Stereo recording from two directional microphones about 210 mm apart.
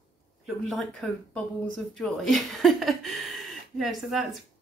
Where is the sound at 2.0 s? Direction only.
Centre (ahead or behind).